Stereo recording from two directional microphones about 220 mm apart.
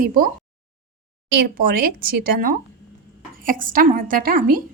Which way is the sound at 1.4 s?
45° right (ahead or behind).